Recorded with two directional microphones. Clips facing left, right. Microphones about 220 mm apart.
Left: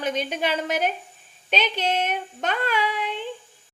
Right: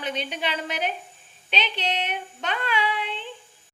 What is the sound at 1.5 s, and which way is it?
Child singing, 45° left (ahead or behind).